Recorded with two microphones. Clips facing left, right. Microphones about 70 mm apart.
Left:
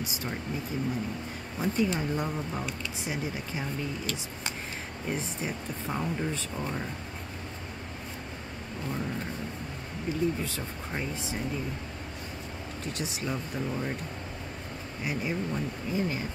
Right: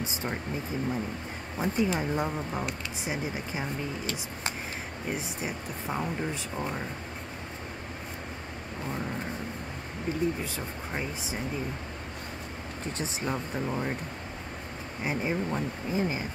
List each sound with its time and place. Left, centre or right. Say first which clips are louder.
0.0 s speech: right 2 dB; right
1.6 s speech: even; centre
5.1 s speech: left 1 dB; centre
10.1 s speech: even; right
10.4 s speech: even; centre
12.9 s speech: right 2 dB; right
15.0 s speech: right 2 dB; right
15.9 s speech: right 1 dB; centre